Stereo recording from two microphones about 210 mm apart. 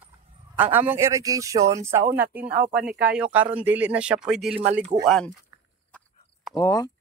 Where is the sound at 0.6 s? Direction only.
10° right (ahead or behind).